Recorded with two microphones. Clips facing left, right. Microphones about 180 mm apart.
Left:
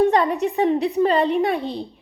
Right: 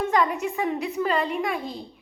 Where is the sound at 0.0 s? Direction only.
35° left (ahead or behind).